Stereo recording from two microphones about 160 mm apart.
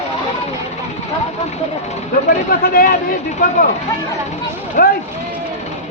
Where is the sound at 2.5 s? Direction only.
65° left (ahead or behind).